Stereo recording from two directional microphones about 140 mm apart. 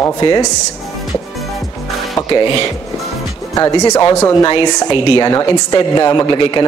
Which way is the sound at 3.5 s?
25° left (ahead or behind).